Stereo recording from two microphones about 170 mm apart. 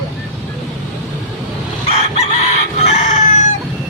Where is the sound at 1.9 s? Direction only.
40° left (ahead or behind).